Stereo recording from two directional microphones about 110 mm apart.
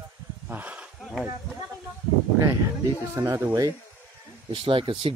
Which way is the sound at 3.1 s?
30° right (ahead or behind).